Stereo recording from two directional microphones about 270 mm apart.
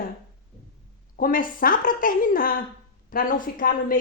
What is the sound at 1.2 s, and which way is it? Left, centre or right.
Speech, left.